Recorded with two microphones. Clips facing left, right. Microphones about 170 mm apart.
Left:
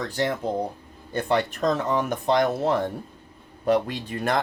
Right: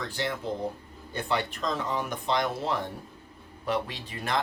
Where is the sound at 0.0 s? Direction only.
45° left (ahead or behind).